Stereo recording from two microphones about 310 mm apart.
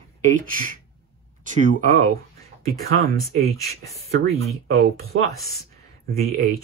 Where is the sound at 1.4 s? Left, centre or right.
Right.